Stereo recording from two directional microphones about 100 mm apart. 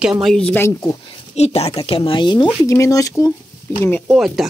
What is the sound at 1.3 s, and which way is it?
Speech, 90° left.